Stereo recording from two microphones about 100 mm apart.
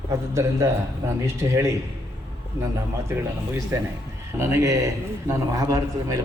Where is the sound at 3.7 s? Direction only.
30° right (ahead or behind).